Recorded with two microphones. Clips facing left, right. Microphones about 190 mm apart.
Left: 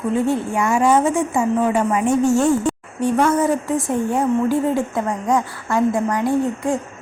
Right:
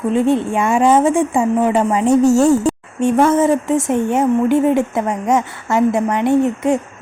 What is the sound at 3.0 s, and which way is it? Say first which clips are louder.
A woman's voice: right 4 dB; 25° right (ahead or behind).